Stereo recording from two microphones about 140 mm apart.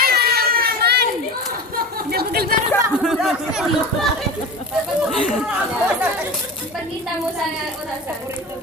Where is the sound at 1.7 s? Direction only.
90° right.